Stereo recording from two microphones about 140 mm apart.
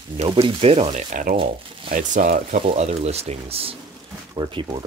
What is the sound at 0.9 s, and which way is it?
Speech, 60° right (ahead or behind).